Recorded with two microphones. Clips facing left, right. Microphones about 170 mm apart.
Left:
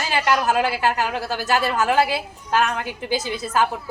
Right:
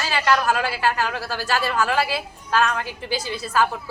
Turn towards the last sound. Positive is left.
turn(degrees=20)  # may be behind; listen again after turning